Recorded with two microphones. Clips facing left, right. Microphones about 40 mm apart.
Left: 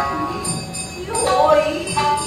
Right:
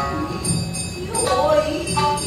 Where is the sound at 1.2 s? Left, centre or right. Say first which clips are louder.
Left 3 dB; centre.